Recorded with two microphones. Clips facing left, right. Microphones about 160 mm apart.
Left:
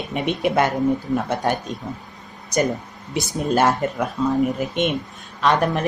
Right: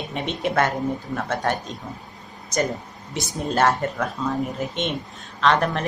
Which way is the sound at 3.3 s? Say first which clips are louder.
Left 2 dB; 15° left (ahead or behind).